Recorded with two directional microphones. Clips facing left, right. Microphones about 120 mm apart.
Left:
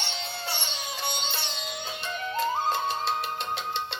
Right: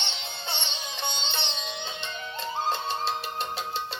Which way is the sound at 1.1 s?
25° right (ahead or behind).